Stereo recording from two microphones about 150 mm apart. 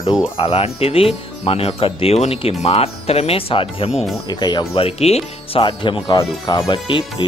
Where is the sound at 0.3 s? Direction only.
40° left (ahead or behind).